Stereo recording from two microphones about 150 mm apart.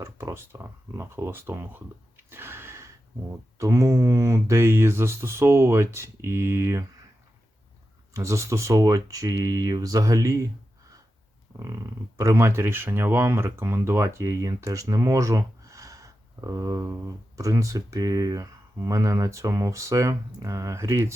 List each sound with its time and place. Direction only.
0.0 s speech: 20° right (ahead or behind)
2.3 s a sound: 15° right (ahead or behind)
3.6 s speech: 20° right (ahead or behind)
8.1 s speech: 20° right (ahead or behind)
11.6 s speech: 25° right (ahead or behind)